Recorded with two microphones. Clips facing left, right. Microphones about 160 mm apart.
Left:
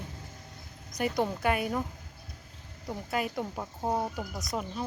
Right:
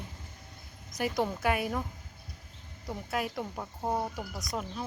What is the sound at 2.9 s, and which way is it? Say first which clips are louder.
Speech: left 2 dB; centre (ahead or behind).